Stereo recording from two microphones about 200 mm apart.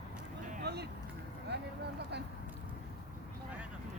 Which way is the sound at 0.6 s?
55° right (ahead or behind).